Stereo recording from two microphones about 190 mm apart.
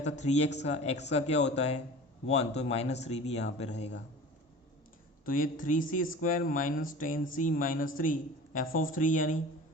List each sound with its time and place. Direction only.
0.0 s speech: 35° left (ahead or behind)
5.2 s speech: 45° left (ahead or behind)